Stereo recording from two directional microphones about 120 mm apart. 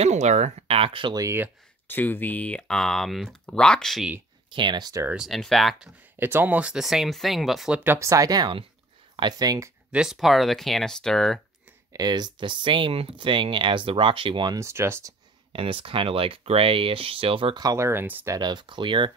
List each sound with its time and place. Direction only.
0.0 s speech: 70° right (ahead or behind); by 1.1 s 50° right (ahead or behind)
1.1 s speech: 25° right (ahead or behind)
1.9 s speech: 15° left (ahead or behind)
4.5 s speech: 40° right (ahead or behind)
5.1 s speech: centre (ahead or behind)
6.1 s speech: 15° right (ahead or behind)
7.8 s speech: 20° right (ahead or behind)
9.9 s speech: centre (ahead or behind)
11.9 s speech: 35° right (ahead or behind)
14.6 s speech: 20° right (ahead or behind)
15.5 s speech: 50° right (ahead or behind)
17.6 s speech: 25° right (ahead or behind)
18.3 s speech: 35° right (ahead or behind)